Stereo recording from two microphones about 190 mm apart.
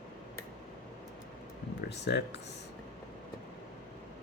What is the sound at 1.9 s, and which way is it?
Speech, 65° left (ahead or behind).